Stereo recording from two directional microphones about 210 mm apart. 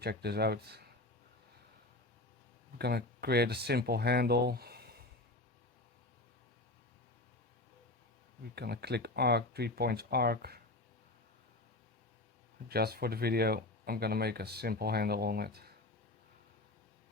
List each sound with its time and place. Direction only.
0.0 s speech: 50° right (ahead or behind)
2.7 s speech: 50° right (ahead or behind)
8.5 s speech: 50° right (ahead or behind)
12.6 s speech: 50° right (ahead or behind)